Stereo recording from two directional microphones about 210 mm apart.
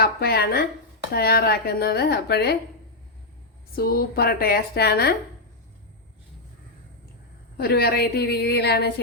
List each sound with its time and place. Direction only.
0.0 s a woman's voice: 50° left (ahead or behind)
3.8 s speech: 45° left (ahead or behind)
7.5 s speech: 45° left (ahead or behind)